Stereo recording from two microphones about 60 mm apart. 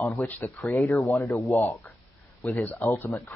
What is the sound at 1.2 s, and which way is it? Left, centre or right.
Speech, left.